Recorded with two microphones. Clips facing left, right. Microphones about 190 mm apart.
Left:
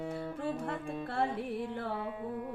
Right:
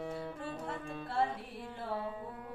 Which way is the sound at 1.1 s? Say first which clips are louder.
Left 1 dB; 60° left (ahead or behind).